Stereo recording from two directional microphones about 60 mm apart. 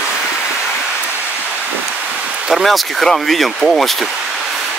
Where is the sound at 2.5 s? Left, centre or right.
Centre.